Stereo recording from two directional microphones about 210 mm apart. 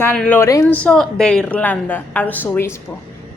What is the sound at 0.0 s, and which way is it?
A woman's voice, 5° left (ahead or behind).